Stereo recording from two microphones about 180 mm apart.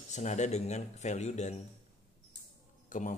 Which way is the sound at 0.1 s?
40° left (ahead or behind).